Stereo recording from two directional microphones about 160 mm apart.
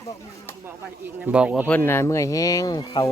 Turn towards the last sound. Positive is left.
turn(degrees=25)  # may be behind; listen again after turning